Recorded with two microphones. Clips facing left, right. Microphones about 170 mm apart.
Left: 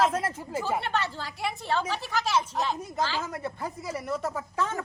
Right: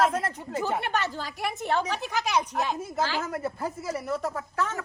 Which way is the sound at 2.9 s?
5° right (ahead or behind).